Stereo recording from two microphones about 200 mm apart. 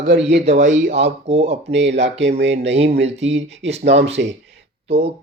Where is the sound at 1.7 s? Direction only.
65° right (ahead or behind).